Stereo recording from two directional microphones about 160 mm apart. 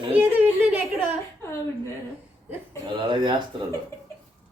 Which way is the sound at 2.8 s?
30° right (ahead or behind).